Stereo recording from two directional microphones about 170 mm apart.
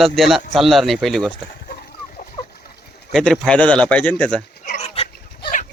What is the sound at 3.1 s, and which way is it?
A man's voice, 5° left (ahead or behind).